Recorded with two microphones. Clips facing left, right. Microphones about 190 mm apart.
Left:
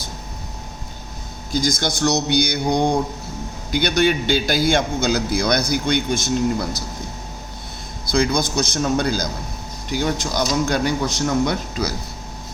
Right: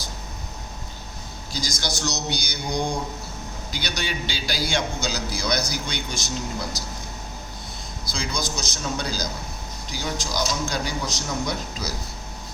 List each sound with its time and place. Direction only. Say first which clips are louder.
1.5 s a man's voice: left 9 dB; 55° left (ahead or behind)
8.0 s a man's voice: left 11 dB; 60° left (ahead or behind)